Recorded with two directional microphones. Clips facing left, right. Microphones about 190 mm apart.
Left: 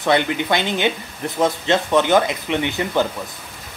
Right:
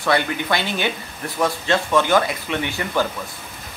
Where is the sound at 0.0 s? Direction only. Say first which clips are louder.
Left 2 dB; 20° left (ahead or behind).